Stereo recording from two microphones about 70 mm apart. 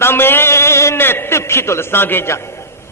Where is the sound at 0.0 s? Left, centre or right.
Left.